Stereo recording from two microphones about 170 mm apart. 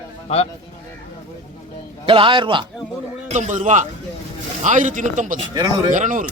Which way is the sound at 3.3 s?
45° right (ahead or behind).